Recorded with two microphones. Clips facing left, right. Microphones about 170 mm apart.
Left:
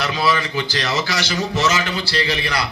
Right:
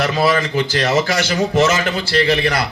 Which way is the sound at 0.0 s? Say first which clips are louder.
Right 4 dB; 50° right (ahead or behind).